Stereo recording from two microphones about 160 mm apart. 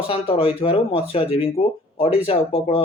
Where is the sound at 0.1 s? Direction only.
35° left (ahead or behind).